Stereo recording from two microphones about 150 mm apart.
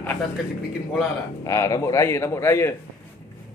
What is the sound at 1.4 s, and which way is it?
Speech, 20° left (ahead or behind).